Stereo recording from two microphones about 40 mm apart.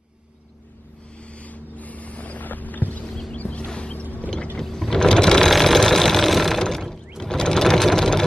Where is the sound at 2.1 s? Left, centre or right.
Left.